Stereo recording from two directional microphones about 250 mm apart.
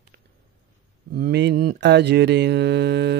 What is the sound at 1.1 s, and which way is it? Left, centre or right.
Mantra, right.